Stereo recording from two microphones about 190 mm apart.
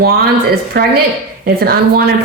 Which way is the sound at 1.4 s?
55° right (ahead or behind).